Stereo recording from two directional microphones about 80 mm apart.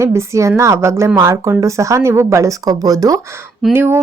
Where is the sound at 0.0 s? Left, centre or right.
Right.